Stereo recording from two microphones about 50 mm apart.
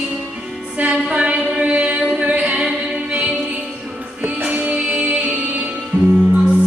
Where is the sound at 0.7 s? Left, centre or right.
Right.